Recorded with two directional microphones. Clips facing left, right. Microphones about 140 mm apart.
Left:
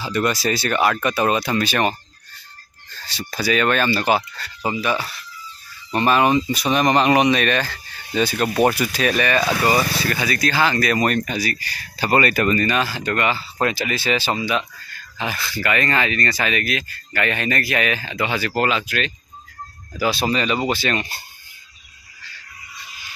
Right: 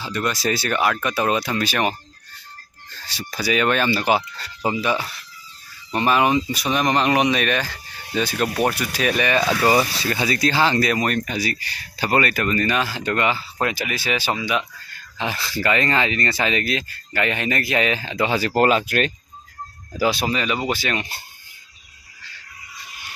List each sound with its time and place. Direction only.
0.0 s speech: 5° left (ahead or behind)
3.2 s speech: 15° right (ahead or behind)
8.2 s speech: centre (ahead or behind)
9.1 s speech: 20° right (ahead or behind)
11.0 s speech: centre (ahead or behind)
11.3 s speech: 25° right (ahead or behind)
12.1 s speech: 5° left (ahead or behind)
12.6 s speech: 15° right (ahead or behind)
15.1 s speech: 30° right (ahead or behind); by 19.1 s 45° right (ahead or behind)
20.0 s speech: 15° right (ahead or behind)